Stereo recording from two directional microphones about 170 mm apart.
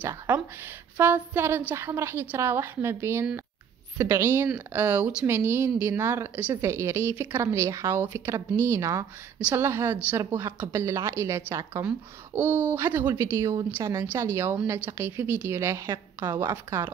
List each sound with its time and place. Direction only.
0.3 s a woman's voice: 10° right (ahead or behind)